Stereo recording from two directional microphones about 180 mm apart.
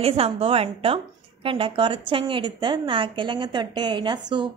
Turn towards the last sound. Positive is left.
turn(degrees=-25)  # may be behind; listen again after turning